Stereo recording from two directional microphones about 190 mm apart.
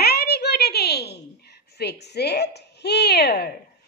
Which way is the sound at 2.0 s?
60° left (ahead or behind).